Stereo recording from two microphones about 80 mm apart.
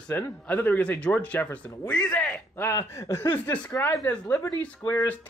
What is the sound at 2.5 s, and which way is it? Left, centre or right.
Speech, left.